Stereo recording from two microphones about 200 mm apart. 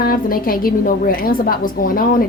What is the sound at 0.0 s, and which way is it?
A woman's voice, 45° left (ahead or behind).